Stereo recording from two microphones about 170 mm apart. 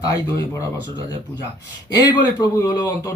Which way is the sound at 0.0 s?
20° left (ahead or behind).